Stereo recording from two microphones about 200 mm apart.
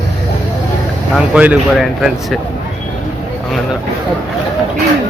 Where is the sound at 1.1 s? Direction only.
5° right (ahead or behind).